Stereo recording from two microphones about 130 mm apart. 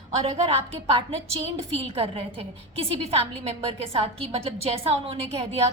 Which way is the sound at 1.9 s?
50° right (ahead or behind).